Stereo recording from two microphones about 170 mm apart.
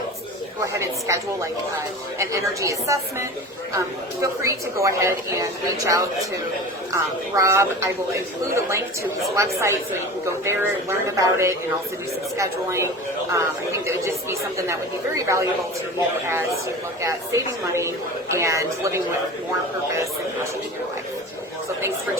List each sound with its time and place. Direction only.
0.6 s a woman's voice: 15° right (ahead or behind)